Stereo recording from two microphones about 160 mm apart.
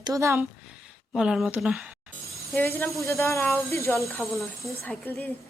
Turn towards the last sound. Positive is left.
turn(degrees=10)  # may be behind; listen again after turning